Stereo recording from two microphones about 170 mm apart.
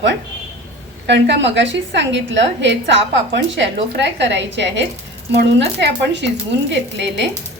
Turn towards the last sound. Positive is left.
turn(degrees=-90)